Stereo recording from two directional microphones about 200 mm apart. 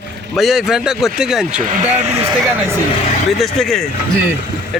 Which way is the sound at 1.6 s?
40° right (ahead or behind).